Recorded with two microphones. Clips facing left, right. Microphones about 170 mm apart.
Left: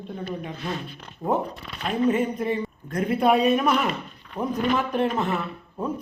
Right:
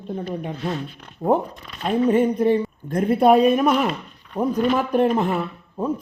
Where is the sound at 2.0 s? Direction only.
35° right (ahead or behind).